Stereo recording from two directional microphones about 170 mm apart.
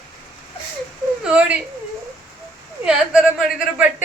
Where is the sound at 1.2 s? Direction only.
5° right (ahead or behind).